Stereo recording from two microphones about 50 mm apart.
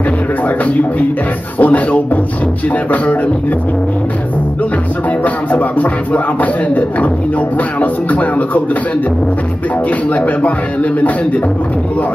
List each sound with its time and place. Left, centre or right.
1.6 s speech: left
5.2 s speech: left
10.1 s speech: left